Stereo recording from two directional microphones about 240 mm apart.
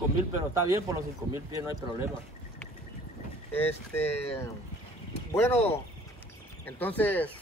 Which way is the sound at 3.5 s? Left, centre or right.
Centre.